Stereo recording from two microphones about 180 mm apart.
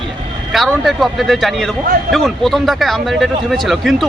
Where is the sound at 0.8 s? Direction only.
Centre (ahead or behind).